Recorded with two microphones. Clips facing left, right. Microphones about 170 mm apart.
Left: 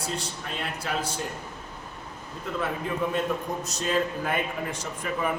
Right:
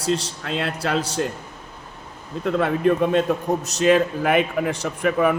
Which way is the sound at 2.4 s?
75° right (ahead or behind).